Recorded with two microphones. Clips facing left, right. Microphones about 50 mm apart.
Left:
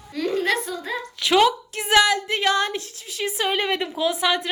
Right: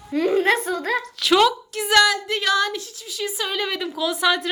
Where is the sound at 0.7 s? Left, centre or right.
Right.